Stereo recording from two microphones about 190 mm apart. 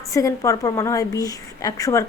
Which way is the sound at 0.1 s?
15° left (ahead or behind).